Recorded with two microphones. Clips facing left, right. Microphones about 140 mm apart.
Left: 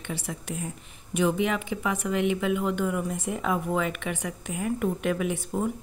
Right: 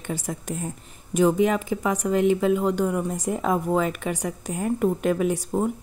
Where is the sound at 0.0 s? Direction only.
45° right (ahead or behind).